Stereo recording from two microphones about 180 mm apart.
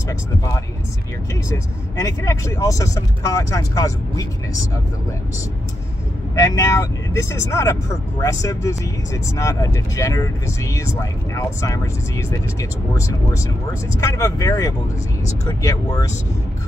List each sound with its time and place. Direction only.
2.0 s speech: 20° left (ahead or behind)
6.3 s speech: 20° left (ahead or behind)